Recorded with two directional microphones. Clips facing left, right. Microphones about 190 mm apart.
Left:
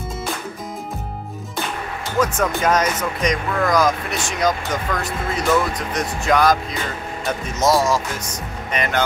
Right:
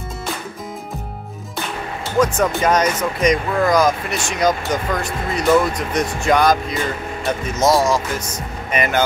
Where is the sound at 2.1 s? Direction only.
Centre (ahead or behind).